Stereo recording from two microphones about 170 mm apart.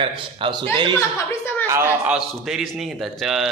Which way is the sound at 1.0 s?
15° left (ahead or behind).